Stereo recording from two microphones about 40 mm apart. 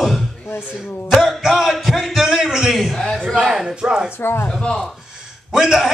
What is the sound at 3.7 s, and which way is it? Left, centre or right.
Speech, right.